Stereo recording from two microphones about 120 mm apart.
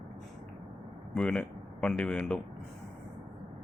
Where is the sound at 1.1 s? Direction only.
10° left (ahead or behind).